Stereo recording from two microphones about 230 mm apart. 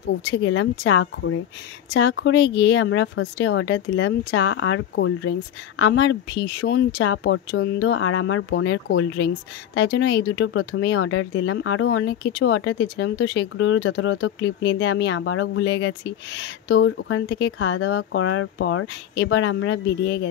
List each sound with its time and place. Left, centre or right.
0.4 s speech: left